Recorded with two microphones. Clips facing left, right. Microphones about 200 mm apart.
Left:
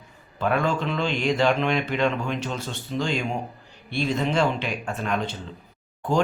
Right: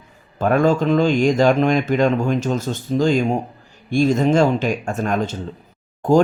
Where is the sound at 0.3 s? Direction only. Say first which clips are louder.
Right 8 dB; 45° right (ahead or behind).